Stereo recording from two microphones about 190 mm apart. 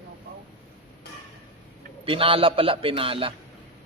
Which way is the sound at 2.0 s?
30° right (ahead or behind).